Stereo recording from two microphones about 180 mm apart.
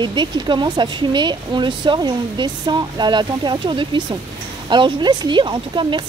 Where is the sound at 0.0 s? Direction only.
25° right (ahead or behind).